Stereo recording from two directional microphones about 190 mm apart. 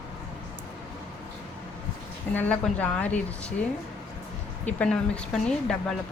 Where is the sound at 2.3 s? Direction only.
10° left (ahead or behind).